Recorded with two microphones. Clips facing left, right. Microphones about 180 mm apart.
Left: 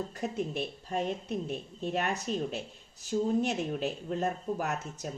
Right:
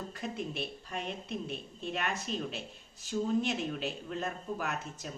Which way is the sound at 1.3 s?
45° left (ahead or behind).